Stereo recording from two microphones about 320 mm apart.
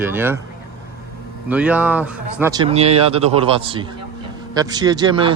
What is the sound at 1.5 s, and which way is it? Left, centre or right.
Speech, centre.